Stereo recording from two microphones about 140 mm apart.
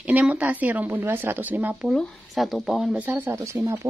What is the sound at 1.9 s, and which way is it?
Speech, centre (ahead or behind).